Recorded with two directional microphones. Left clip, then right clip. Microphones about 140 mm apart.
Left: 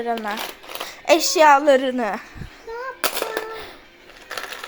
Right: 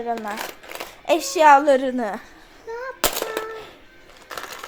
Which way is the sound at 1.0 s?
10° left (ahead or behind).